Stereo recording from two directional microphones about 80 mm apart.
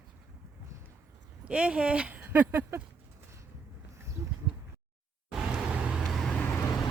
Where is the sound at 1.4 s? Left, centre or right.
Centre; by 2.8 s right.